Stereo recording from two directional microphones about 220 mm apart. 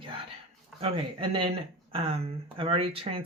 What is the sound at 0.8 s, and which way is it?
Speech, 25° right (ahead or behind).